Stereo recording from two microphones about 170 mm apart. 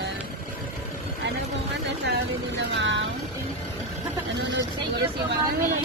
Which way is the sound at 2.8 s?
90° right.